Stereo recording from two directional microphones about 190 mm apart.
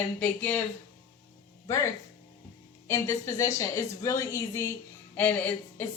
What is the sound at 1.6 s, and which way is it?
Speech, 15° left (ahead or behind).